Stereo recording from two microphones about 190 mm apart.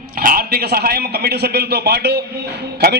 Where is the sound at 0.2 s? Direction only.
50° right (ahead or behind).